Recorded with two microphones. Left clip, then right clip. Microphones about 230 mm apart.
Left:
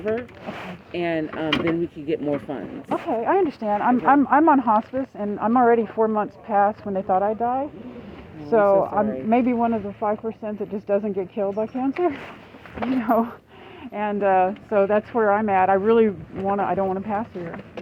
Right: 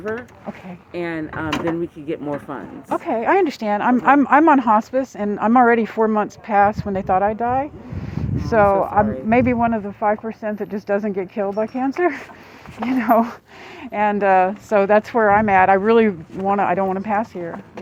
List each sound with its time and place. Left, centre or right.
0.9 s speech: centre
2.9 s speech: right